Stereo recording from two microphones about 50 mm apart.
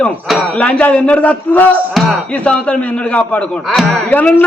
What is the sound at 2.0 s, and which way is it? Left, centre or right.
Speech, centre.